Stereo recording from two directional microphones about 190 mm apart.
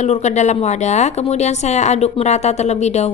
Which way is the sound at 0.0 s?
35° left (ahead or behind).